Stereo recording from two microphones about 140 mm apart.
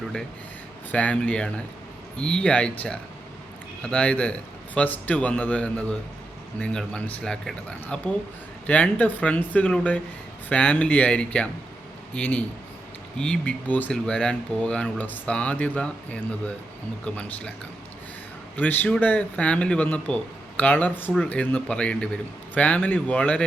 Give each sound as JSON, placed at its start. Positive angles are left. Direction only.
{"t": 0.9, "sound": "speech", "side_deg": 10}
{"t": 18.5, "sound": "speech", "side_deg": 10}